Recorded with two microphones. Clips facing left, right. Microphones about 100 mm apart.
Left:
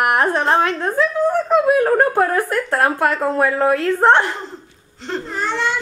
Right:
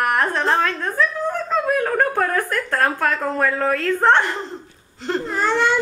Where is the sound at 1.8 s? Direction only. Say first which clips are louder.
Left 4 dB; 25° left (ahead or behind).